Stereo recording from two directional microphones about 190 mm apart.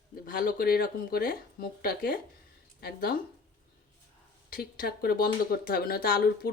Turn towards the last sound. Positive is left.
turn(degrees=50)  # may be behind; listen again after turning